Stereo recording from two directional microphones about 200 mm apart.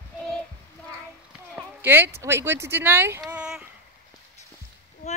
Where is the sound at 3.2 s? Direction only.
5° right (ahead or behind).